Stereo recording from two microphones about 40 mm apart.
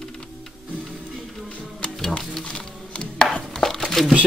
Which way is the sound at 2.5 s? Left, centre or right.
Left.